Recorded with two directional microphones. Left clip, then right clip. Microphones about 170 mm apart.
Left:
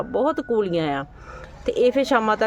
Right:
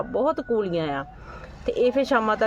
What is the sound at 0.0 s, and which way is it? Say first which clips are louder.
Speech: left 2 dB; 20° left (ahead or behind).